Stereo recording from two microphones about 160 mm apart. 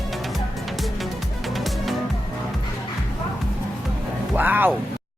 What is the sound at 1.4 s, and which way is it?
Music, centre (ahead or behind).